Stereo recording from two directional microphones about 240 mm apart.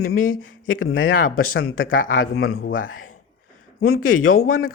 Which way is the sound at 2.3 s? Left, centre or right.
Left.